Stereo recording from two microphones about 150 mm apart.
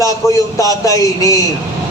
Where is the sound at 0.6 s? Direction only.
20° left (ahead or behind).